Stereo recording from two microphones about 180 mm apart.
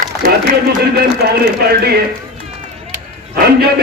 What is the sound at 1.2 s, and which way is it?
Speech, 65° right (ahead or behind).